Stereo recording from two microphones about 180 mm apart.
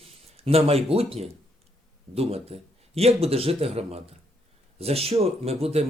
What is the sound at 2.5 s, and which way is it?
Speech, 35° right (ahead or behind).